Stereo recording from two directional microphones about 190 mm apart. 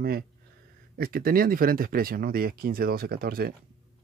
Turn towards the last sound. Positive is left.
turn(degrees=-55)  # may be behind; listen again after turning